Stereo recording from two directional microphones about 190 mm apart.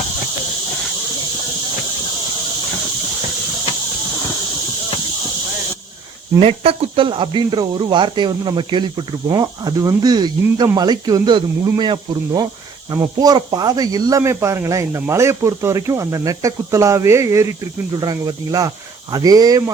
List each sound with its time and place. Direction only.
6.4 s speech: 30° right (ahead or behind)